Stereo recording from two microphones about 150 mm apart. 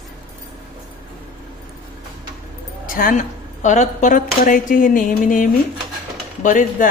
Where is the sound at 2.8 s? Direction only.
65° left (ahead or behind).